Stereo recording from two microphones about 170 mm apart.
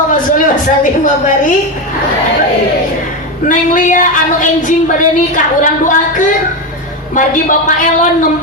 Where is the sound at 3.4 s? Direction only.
50° left (ahead or behind).